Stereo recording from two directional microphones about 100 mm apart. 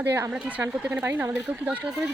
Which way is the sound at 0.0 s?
25° right (ahead or behind).